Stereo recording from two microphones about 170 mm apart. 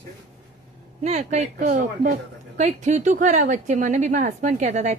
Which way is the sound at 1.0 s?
40° right (ahead or behind).